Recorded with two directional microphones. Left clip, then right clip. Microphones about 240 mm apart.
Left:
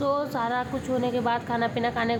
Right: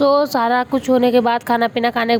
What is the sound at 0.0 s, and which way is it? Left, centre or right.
A woman's voice, right.